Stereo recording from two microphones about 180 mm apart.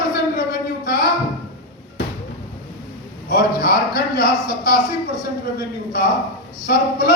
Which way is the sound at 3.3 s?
55° left (ahead or behind).